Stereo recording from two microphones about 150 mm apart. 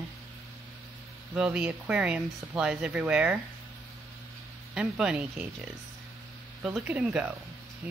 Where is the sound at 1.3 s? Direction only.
5° right (ahead or behind).